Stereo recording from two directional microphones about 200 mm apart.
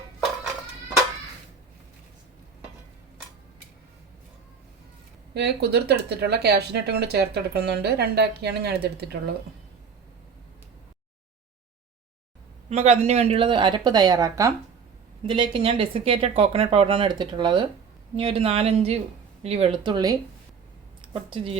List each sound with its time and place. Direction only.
5.3 s speech: 55° right (ahead or behind)
12.7 s speech: 35° right (ahead or behind)